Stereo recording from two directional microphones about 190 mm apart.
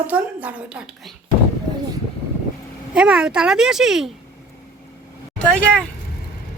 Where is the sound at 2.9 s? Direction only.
5° right (ahead or behind).